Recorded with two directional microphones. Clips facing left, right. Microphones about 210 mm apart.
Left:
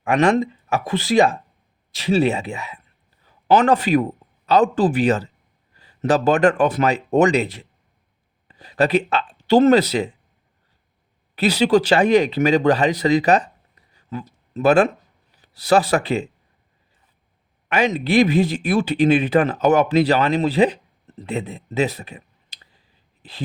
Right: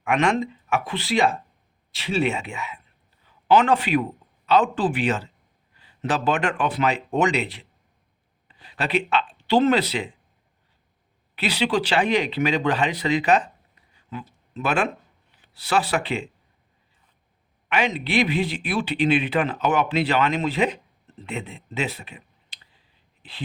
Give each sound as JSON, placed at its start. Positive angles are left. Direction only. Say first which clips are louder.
{"t": 0.0, "sound": "a man's voice", "louder": "left 5 dB", "side_deg": 35}
{"t": 11.3, "sound": "speech", "louder": "left 7 dB", "side_deg": 40}
{"t": 13.9, "sound": "a sound", "louder": "left 5 dB", "side_deg": 40}
{"t": 15.4, "sound": "speech", "louder": "left 7 dB", "side_deg": 40}
{"t": 17.7, "sound": "speech", "louder": "left 5 dB", "side_deg": 40}